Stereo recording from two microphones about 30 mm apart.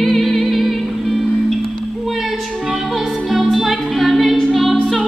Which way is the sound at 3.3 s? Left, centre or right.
Centre.